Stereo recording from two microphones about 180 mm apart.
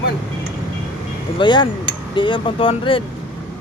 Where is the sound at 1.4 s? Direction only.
25° left (ahead or behind).